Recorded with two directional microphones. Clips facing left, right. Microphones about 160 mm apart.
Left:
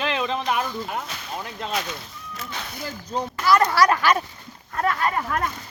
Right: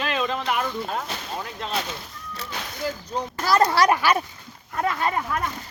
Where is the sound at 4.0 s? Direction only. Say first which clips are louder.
Left 1 dB; 10° right (ahead or behind).